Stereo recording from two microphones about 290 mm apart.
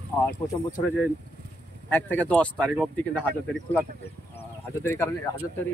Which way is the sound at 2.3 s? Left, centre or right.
Centre.